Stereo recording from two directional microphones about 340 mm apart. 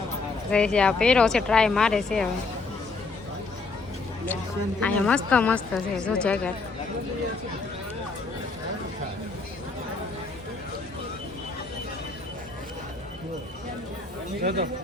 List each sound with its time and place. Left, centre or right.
0.5 s speech: centre
4.8 s speech: centre
14.4 s speech: right